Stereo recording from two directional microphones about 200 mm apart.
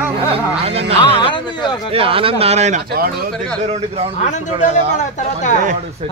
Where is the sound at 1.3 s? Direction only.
20° left (ahead or behind).